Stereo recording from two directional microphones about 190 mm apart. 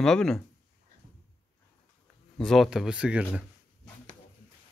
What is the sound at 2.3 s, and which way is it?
Speech, centre (ahead or behind).